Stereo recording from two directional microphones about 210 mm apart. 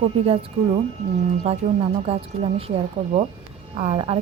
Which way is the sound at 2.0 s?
25° right (ahead or behind).